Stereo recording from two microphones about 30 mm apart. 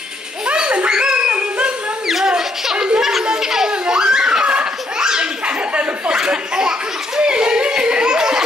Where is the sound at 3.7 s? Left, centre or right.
Right.